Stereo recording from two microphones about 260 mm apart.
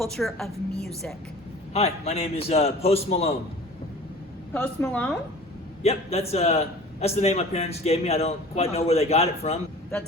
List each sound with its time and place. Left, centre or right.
0.0 s a woman's voice: centre
1.7 s a man's voice: left
4.5 s a woman's voice: centre
5.8 s a man's voice: left